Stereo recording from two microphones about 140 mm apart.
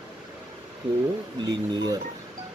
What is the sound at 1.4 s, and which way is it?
Speech, 30° right (ahead or behind).